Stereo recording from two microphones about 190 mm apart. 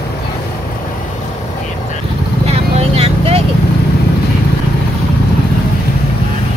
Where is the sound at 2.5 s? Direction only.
30° right (ahead or behind).